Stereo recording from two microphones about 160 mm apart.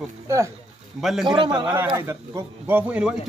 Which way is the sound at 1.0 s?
Centre (ahead or behind).